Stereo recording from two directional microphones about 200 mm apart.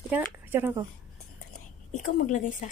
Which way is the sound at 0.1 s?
10° right (ahead or behind).